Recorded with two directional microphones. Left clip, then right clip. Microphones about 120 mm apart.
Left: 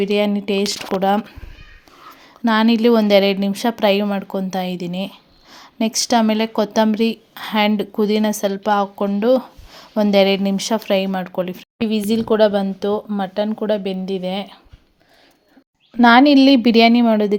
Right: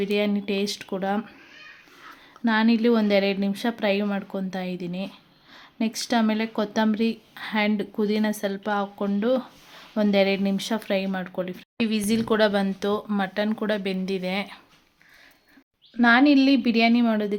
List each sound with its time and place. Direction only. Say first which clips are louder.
0.0 s speech: left 7 dB; 35° left (ahead or behind)
2.4 s a woman's voice: left 6 dB; 35° left (ahead or behind)
16.0 s a woman's voice: left 7 dB; 60° left (ahead or behind)
17.0 s speech: left 8 dB; 45° left (ahead or behind)